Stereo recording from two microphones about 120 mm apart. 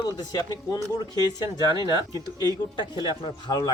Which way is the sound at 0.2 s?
35° left (ahead or behind).